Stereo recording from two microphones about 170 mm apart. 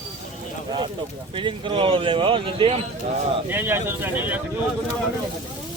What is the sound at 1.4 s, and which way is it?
Speech, 30° right (ahead or behind).